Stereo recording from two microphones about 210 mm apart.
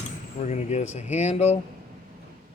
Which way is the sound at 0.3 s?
35° left (ahead or behind).